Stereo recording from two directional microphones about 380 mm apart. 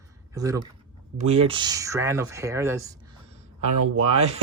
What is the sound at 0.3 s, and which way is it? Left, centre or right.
Speech, centre.